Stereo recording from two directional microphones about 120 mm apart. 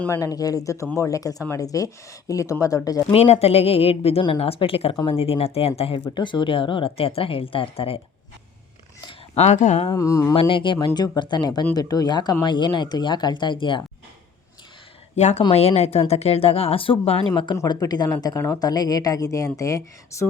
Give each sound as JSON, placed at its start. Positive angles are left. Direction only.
{"t": 0.1, "sound": "speech", "side_deg": 30}
{"t": 3.1, "sound": "speech", "side_deg": 60}
{"t": 6.1, "sound": "speech", "side_deg": 40}
{"t": 9.3, "sound": "speech", "side_deg": 70}
{"t": 9.8, "sound": "speech", "side_deg": 30}
{"t": 10.3, "sound": "speech", "side_deg": 45}
{"t": 15.1, "sound": "speech", "side_deg": 70}